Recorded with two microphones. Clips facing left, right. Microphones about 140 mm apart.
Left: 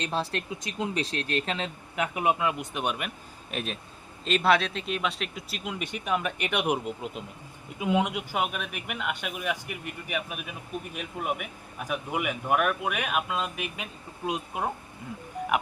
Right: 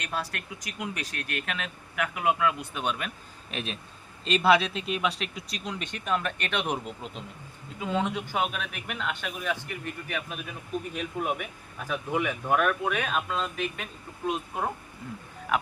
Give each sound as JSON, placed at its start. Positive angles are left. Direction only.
{"t": 0.0, "sound": "speech", "side_deg": 25}
{"t": 3.5, "sound": "speech", "side_deg": 0}